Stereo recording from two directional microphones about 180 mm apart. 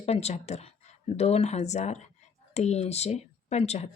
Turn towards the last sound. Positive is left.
turn(degrees=35)  # may be behind; listen again after turning